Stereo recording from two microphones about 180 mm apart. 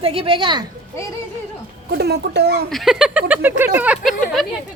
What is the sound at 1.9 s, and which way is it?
Speech, 65° right (ahead or behind).